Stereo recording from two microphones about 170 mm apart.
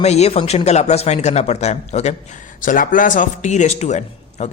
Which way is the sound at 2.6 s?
55° left (ahead or behind).